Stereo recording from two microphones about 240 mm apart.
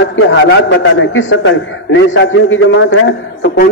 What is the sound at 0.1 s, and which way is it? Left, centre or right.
A man's voice, left.